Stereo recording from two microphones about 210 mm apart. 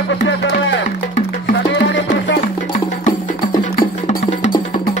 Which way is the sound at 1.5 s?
60° left (ahead or behind).